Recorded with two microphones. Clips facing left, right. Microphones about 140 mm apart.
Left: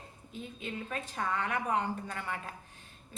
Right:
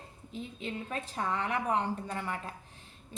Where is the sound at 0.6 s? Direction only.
30° right (ahead or behind).